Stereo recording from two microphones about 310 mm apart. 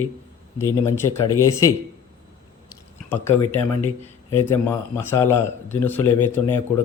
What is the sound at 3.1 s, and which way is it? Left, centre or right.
Speech, centre.